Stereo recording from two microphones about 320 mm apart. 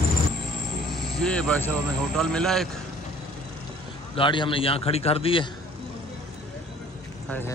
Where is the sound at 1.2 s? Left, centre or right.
Centre.